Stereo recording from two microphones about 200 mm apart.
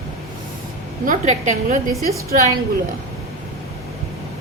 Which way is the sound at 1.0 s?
40° right (ahead or behind).